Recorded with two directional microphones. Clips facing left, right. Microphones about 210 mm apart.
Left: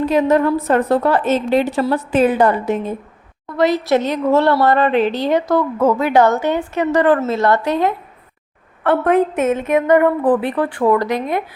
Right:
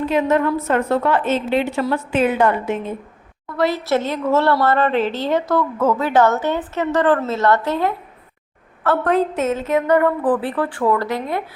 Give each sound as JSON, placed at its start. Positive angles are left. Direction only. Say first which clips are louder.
{"t": 0.0, "sound": "a woman's voice", "louder": "left 3 dB", "side_deg": 40}
{"t": 3.6, "sound": "a woman's voice", "louder": "left 4 dB", "side_deg": 15}
{"t": 9.0, "sound": "a woman's voice", "louder": "left 4 dB", "side_deg": 10}